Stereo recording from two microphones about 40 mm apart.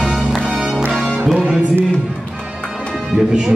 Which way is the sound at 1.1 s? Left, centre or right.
Centre.